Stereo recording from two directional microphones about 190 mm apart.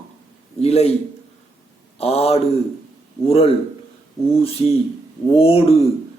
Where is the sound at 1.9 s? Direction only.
30° left (ahead or behind).